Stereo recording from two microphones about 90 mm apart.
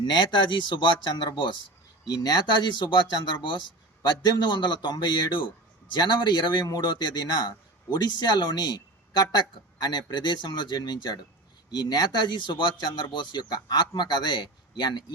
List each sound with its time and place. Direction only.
0.0 s speech: 60° left (ahead or behind)
2.0 s a man's voice: 50° left (ahead or behind)